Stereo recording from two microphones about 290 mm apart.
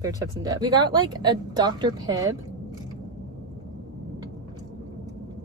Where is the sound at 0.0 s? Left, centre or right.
Centre.